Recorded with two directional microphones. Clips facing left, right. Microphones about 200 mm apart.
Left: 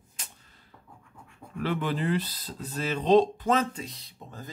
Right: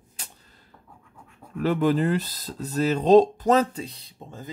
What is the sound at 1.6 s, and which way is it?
Speech, 45° right (ahead or behind).